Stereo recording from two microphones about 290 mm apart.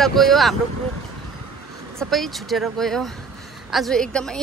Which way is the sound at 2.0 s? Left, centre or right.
Centre.